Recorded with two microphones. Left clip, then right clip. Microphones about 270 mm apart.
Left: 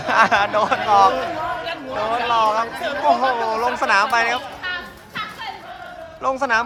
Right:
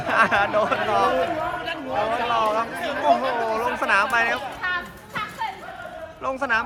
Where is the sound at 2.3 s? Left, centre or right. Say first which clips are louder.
Left 6 dB; centre.